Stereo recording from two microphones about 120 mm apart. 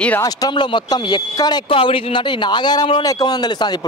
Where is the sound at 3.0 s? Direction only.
30° left (ahead or behind).